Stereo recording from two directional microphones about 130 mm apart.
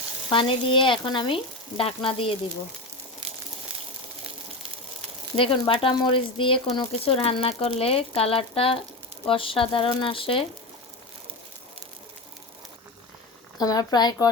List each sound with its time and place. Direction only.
0.3 s frying: 40° left (ahead or behind)
1.8 s speech: 45° left (ahead or behind)
5.4 s speech: 45° left (ahead or behind)
10.0 s frying: 40° left (ahead or behind)
13.6 s speech: 30° left (ahead or behind)